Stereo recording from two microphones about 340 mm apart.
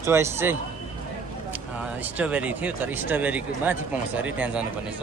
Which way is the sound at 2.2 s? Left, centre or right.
Centre.